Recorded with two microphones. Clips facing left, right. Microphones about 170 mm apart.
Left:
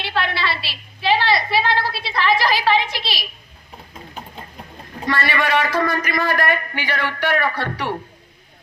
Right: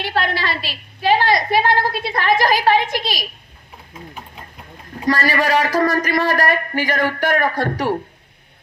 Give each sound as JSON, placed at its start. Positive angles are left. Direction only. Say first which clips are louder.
{"t": 0.0, "sound": "a woman's voice", "louder": "right 2 dB", "side_deg": -40}
{"t": 5.0, "sound": "speech", "louder": "right 3 dB", "side_deg": -40}